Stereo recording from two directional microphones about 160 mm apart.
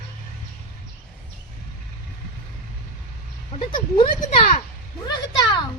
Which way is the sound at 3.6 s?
30° left (ahead or behind).